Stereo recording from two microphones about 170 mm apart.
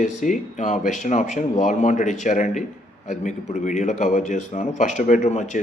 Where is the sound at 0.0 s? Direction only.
45° left (ahead or behind).